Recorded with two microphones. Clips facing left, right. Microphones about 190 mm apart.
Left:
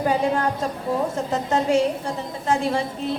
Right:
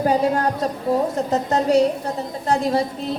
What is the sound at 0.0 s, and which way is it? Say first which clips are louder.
A woman's voice: right 2 dB; 40° right (ahead or behind).